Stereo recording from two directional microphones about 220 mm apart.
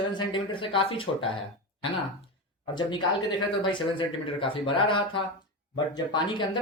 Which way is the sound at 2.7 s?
20° left (ahead or behind).